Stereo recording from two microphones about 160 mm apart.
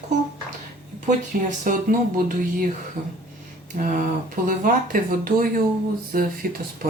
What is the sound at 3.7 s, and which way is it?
Speech, 50° right (ahead or behind).